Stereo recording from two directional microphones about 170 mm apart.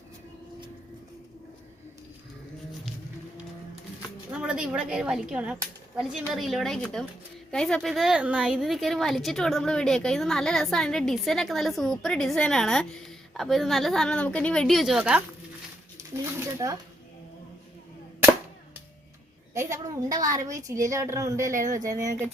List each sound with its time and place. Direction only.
4.3 s a woman's voice: 5° right (ahead or behind)
16.4 s speech: 20° right (ahead or behind)
19.5 s a woman's voice: 20° right (ahead or behind)